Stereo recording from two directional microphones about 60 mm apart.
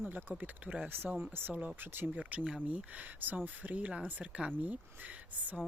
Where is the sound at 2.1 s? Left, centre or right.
Right.